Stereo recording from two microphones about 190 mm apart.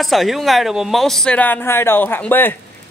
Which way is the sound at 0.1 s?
Centre (ahead or behind).